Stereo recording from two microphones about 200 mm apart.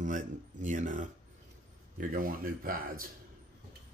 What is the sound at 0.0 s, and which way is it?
Speech, 40° right (ahead or behind).